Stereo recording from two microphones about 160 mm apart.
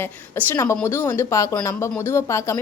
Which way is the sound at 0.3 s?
15° left (ahead or behind).